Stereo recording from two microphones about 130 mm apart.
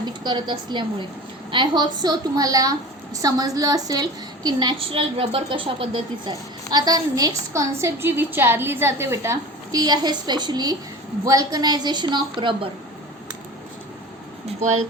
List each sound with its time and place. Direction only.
0.0 s a woman's voice: 35° right (ahead or behind)
4.8 s speech: 45° right (ahead or behind)
6.7 s a woman's voice: 30° right (ahead or behind)